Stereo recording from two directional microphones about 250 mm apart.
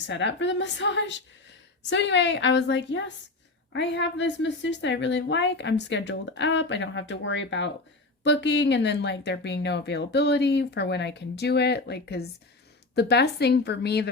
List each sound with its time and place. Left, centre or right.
0.1 s a woman's voice: left